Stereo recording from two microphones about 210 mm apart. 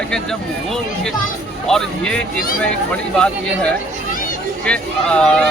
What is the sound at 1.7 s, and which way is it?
Speech, 5° left (ahead or behind).